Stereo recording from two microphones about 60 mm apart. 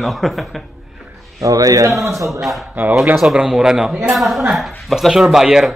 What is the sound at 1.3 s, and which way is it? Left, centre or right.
Speech, right.